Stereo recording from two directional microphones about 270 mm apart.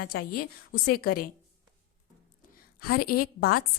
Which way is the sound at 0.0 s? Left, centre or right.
Left.